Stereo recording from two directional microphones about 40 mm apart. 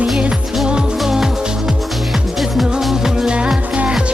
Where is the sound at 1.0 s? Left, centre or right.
Centre.